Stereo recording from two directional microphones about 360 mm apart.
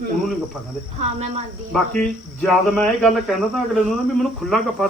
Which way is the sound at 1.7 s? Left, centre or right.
Centre.